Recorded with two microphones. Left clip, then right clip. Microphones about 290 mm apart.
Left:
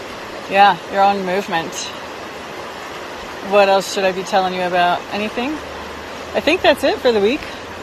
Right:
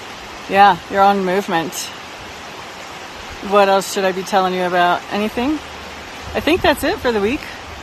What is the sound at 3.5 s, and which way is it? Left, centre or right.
Speech, right.